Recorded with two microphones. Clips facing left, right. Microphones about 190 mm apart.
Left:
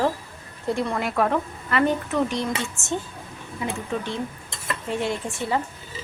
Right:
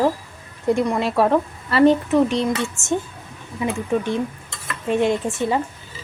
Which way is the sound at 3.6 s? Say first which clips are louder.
Right 7 dB; 15° right (ahead or behind).